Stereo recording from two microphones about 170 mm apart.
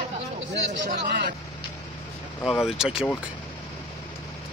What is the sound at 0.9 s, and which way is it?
Speech, 55° right (ahead or behind).